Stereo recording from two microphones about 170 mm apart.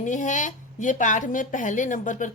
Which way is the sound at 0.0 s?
45° left (ahead or behind).